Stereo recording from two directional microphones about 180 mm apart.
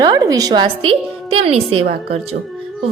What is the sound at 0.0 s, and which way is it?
A woman's voice, 20° right (ahead or behind).